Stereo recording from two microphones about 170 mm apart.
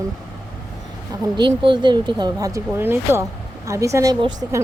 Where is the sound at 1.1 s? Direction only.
25° right (ahead or behind).